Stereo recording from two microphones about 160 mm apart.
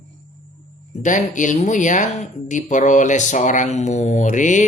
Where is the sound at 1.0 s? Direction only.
50° left (ahead or behind).